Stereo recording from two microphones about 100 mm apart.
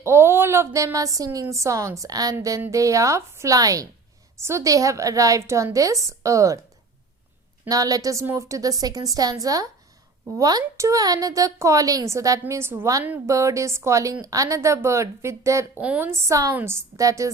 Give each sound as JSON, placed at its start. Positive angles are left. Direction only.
{"t": 0.0, "sound": "a sound", "side_deg": -25}
{"t": 0.9, "sound": "a woman's voice", "side_deg": -35}
{"t": 7.7, "sound": "a woman's voice", "side_deg": -35}
{"t": 15.8, "sound": "a woman's voice", "side_deg": -15}